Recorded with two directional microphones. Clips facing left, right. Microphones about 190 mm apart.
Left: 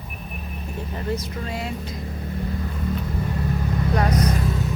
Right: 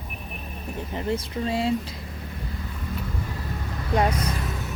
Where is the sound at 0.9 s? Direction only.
30° right (ahead or behind).